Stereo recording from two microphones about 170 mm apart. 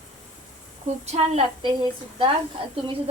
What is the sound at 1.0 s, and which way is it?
Speech, 40° right (ahead or behind).